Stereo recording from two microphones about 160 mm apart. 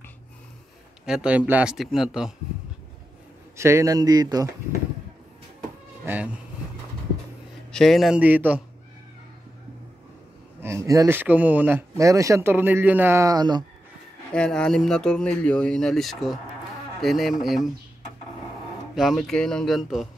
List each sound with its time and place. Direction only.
1.0 s speech: 5° right (ahead or behind)
3.5 s speech: 15° right (ahead or behind)
6.0 s speech: 10° right (ahead or behind)
7.7 s speech: centre (ahead or behind)
10.6 s speech: 20° right (ahead or behind)
14.3 s speech: 5° left (ahead or behind)
18.9 s speech: centre (ahead or behind)